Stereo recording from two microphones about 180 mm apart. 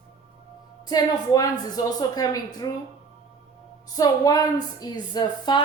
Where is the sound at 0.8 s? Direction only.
20° left (ahead or behind).